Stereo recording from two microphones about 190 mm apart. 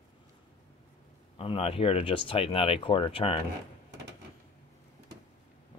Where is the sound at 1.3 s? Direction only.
30° left (ahead or behind).